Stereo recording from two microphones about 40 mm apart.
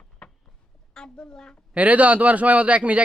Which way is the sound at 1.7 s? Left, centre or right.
Right.